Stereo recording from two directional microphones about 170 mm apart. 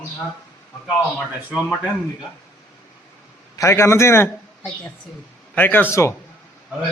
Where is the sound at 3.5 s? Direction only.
15° left (ahead or behind).